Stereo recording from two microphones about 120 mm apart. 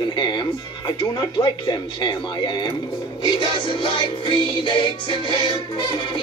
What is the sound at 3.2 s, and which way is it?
Music, 40° left (ahead or behind).